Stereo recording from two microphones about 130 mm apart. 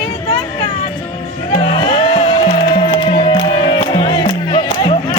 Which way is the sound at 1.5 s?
40° left (ahead or behind).